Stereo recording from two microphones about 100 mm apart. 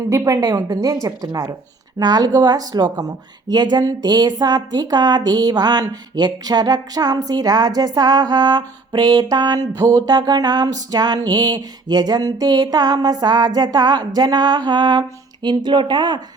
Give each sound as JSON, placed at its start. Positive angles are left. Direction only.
{"t": 0.1, "sound": "a woman's voice", "side_deg": -35}